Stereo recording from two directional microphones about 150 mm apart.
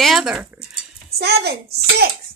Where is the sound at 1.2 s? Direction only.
90° right.